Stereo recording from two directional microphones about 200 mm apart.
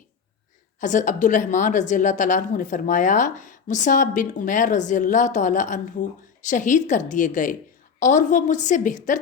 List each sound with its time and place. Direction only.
0.8 s a woman's voice: 40° left (ahead or behind)